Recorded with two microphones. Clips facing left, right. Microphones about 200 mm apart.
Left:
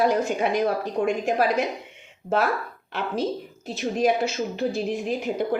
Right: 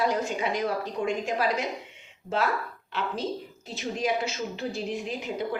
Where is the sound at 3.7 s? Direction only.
55° left (ahead or behind).